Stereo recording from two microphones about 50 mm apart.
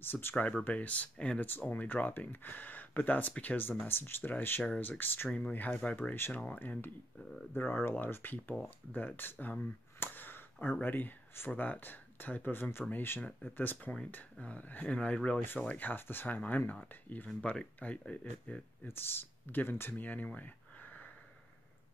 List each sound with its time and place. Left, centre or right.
0.0 s speech: left
0.7 s speech: left
1.4 s speech: left
3.8 s speech: left
15.8 s speech: left
17.4 s speech: centre
18.9 s speech: left